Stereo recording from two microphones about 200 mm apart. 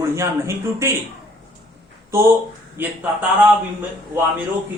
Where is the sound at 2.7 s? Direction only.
10° right (ahead or behind).